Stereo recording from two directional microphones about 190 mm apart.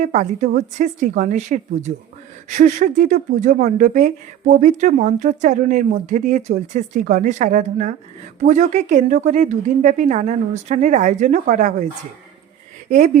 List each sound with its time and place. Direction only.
0.0 s speech: 40° right (ahead or behind)